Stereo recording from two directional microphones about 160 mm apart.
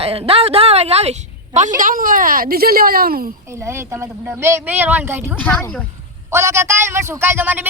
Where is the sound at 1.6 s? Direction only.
55° right (ahead or behind).